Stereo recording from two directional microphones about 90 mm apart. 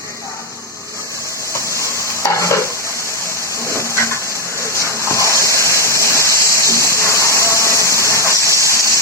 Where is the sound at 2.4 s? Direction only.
35° left (ahead or behind).